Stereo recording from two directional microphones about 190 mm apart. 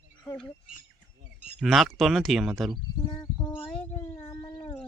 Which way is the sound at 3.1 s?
25° left (ahead or behind).